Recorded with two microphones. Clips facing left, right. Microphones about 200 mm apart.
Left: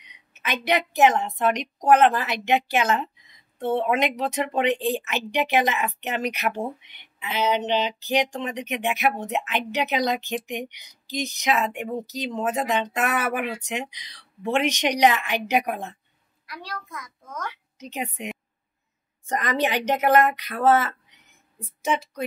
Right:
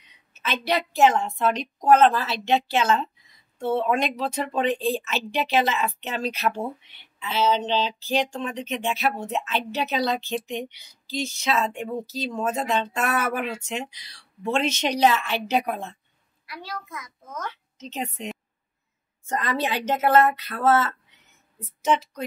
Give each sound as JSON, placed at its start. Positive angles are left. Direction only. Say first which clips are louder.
{"t": 0.0, "sound": "speech", "louder": "right 1 dB", "side_deg": 15}
{"t": 16.4, "sound": "a child's voice", "louder": "right 1 dB", "side_deg": -5}
{"t": 17.5, "sound": "a woman's voice", "louder": "even", "side_deg": 15}
{"t": 19.3, "sound": "speech", "louder": "left 2 dB", "side_deg": 15}